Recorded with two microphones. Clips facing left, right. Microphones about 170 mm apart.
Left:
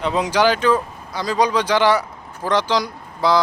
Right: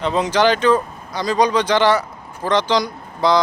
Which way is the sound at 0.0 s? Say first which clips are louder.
Right 1 dB; 10° left (ahead or behind).